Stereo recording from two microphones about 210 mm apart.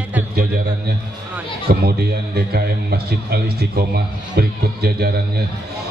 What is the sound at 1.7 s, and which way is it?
A man's voice, 45° right (ahead or behind).